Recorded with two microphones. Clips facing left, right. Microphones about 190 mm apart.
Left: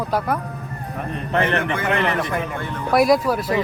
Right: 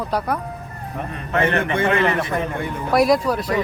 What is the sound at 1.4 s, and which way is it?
Speech, 25° right (ahead or behind).